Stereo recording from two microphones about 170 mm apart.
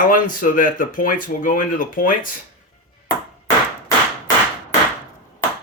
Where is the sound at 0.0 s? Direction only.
50° left (ahead or behind).